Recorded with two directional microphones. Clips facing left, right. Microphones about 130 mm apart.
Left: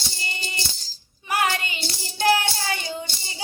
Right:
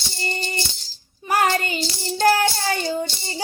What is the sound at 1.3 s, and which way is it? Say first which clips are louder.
Child singing: right 4 dB; 40° right (ahead or behind).